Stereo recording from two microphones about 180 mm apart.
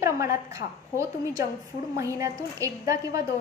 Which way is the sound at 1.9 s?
15° right (ahead or behind).